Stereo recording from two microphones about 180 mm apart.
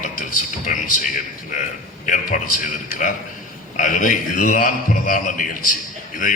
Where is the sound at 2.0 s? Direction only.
45° left (ahead or behind).